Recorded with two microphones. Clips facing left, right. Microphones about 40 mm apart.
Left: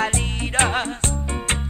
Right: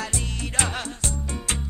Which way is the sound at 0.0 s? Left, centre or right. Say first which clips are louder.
Left 7 dB; left.